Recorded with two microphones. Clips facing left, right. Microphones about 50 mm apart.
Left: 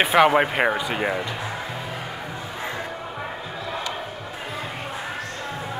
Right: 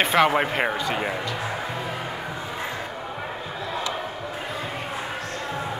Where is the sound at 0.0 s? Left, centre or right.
Centre.